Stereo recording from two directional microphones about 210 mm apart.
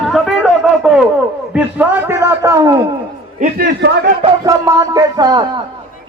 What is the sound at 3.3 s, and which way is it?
Speech, 45° right (ahead or behind).